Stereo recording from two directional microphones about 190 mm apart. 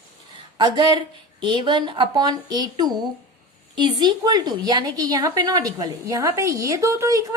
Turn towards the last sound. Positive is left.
turn(degrees=-15)  # may be behind; listen again after turning